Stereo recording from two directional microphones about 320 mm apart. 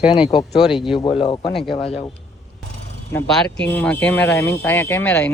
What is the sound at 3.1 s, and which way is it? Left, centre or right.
Speech, centre.